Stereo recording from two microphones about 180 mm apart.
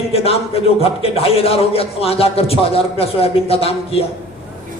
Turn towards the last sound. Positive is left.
turn(degrees=35)  # may be behind; listen again after turning